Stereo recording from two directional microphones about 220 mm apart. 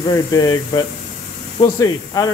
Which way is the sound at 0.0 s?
15° left (ahead or behind).